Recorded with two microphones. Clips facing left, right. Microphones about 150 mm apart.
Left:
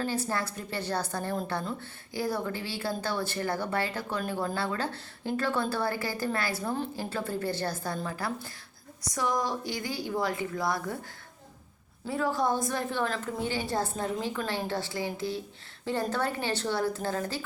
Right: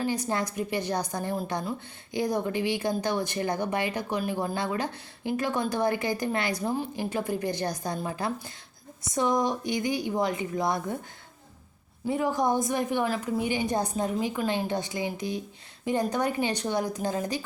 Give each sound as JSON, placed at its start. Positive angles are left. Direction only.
{"t": 0.0, "sound": "a woman's voice", "side_deg": -15}
{"t": 12.0, "sound": "speech", "side_deg": -20}